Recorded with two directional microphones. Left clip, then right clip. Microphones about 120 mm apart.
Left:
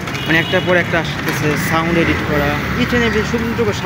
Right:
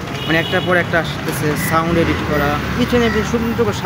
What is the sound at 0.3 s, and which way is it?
Speech, 15° right (ahead or behind).